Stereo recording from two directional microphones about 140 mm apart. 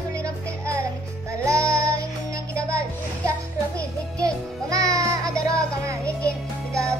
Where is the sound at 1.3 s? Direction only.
20° right (ahead or behind).